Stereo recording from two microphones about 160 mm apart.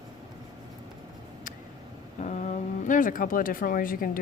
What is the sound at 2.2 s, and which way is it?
Speech, 50° left (ahead or behind).